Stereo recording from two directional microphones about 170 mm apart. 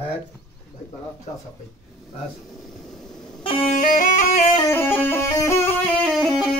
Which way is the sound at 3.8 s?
50° left (ahead or behind).